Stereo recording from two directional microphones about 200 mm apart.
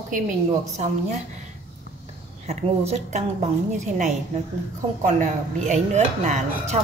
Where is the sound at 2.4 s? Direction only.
35° right (ahead or behind).